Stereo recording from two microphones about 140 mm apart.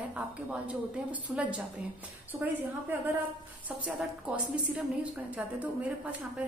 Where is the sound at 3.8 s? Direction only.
10° right (ahead or behind).